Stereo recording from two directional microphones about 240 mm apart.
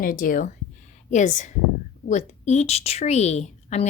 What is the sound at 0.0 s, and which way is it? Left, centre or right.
A woman's voice, left.